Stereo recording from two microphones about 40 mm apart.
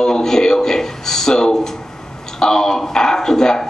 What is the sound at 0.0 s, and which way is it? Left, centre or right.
A man's voice, centre.